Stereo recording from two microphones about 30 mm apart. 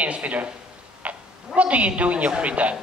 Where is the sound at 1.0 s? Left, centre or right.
Right.